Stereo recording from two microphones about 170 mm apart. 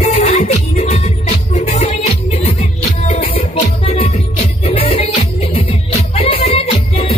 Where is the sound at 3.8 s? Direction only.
35° left (ahead or behind).